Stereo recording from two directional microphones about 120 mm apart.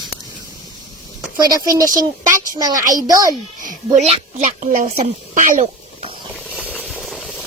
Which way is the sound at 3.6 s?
70° right (ahead or behind).